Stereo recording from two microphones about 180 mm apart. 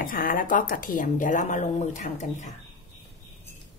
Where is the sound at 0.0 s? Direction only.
50° left (ahead or behind).